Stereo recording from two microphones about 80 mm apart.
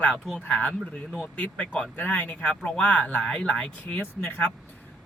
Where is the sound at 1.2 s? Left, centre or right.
Centre.